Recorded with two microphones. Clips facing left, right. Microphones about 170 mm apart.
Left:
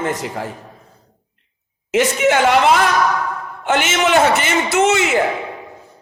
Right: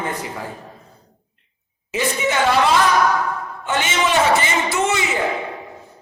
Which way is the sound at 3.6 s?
90° left.